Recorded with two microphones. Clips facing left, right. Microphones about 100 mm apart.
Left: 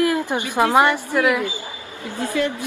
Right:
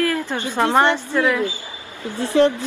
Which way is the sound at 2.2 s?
30° right (ahead or behind).